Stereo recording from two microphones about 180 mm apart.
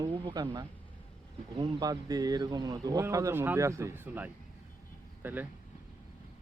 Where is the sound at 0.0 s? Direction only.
20° right (ahead or behind).